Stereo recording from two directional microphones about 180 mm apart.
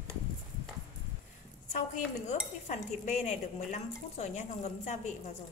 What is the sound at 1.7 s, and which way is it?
Dishes, 45° left (ahead or behind).